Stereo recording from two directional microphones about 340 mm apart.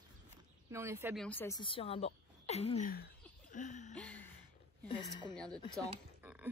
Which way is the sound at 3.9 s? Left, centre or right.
Centre.